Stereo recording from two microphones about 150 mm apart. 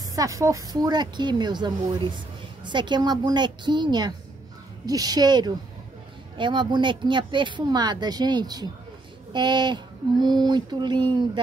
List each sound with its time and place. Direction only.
0.1 s a woman's voice: 20° right (ahead or behind)